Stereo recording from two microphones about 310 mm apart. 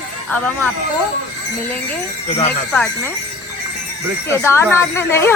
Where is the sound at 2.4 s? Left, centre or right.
Centre.